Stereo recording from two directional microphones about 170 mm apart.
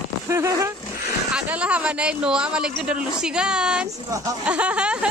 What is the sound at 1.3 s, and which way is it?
Speech, 5° right (ahead or behind).